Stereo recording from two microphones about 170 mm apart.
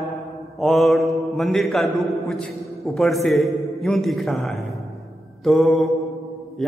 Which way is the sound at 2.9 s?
Centre (ahead or behind).